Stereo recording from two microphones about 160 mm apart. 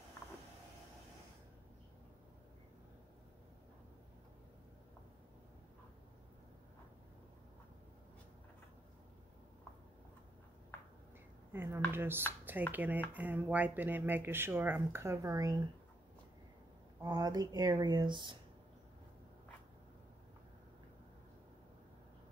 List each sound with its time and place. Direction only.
11.5 s speech: 15° right (ahead or behind)
17.0 s speech: 25° right (ahead or behind)